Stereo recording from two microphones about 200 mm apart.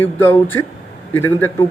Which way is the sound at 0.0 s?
10° left (ahead or behind).